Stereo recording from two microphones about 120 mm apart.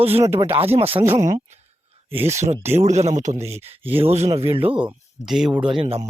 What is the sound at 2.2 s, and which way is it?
A man's voice, 70° right (ahead or behind).